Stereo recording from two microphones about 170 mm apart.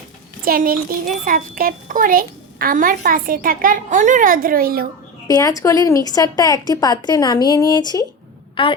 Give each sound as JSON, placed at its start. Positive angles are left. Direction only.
{"t": 0.4, "sound": "a child's voice", "side_deg": -60}
{"t": 5.3, "sound": "a woman's voice", "side_deg": 20}